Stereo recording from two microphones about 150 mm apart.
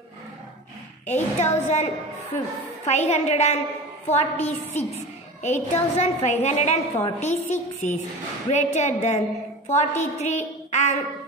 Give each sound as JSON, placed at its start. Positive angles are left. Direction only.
{"t": 1.0, "sound": "a woman's voice", "side_deg": 50}